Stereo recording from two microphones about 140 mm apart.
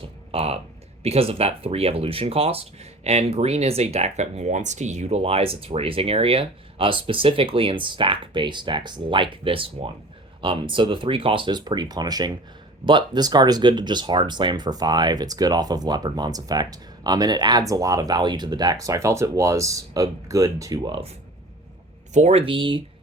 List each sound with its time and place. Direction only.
0.0 s a sound: 45° right (ahead or behind)
1.0 s speech: 45° right (ahead or behind); by 20.9 s 25° right (ahead or behind)
22.1 s speech: 50° right (ahead or behind)